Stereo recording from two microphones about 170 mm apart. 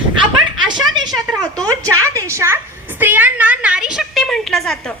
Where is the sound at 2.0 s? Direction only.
20° right (ahead or behind); by 4.9 s centre (ahead or behind).